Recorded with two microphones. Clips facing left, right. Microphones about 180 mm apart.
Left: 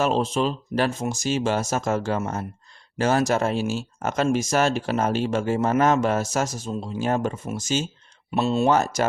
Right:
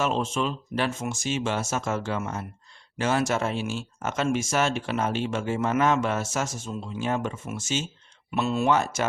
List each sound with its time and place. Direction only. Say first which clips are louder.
0.0 s speech: left 4 dB; 35° left (ahead or behind)